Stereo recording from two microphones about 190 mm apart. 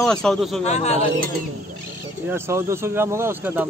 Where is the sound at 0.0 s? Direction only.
5° left (ahead or behind).